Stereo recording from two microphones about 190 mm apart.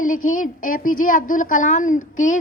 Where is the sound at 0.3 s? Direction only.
45° left (ahead or behind).